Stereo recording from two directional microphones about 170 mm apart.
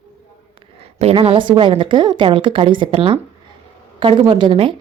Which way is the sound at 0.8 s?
35° right (ahead or behind).